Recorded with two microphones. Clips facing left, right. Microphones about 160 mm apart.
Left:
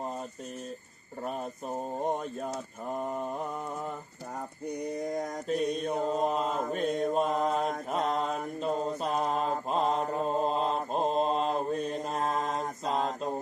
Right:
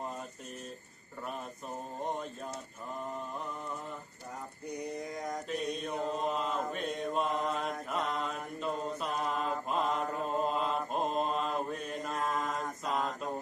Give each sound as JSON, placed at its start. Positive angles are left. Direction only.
{"t": 5.5, "sound": "mantra", "side_deg": 40}